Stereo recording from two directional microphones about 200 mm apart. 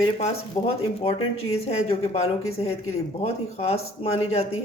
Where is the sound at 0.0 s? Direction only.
30° left (ahead or behind).